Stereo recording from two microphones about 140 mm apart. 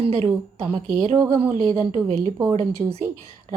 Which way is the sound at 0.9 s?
30° right (ahead or behind).